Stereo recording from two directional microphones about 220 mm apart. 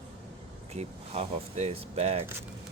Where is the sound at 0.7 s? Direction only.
30° right (ahead or behind).